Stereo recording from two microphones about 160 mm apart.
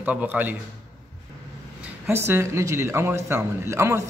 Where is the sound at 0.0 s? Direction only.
10° right (ahead or behind).